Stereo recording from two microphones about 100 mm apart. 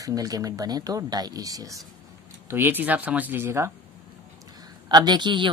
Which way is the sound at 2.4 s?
25° right (ahead or behind).